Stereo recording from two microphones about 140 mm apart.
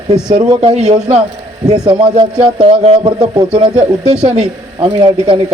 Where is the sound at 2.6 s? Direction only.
45° right (ahead or behind).